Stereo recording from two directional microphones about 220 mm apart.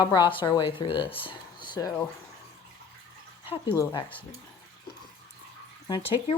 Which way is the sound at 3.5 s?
20° left (ahead or behind).